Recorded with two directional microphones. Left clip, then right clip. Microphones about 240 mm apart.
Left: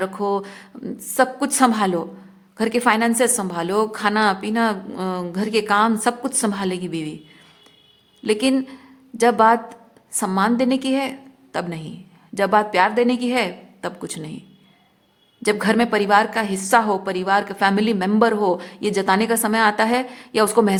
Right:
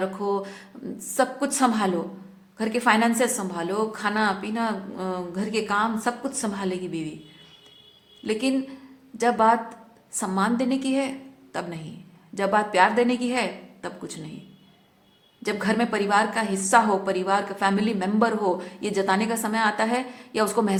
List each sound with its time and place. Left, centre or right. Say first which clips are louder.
0.0 s a woman's voice: left 4 dB; left
8.2 s a woman's voice: left 6 dB; left
15.4 s a woman's voice: left 6 dB; left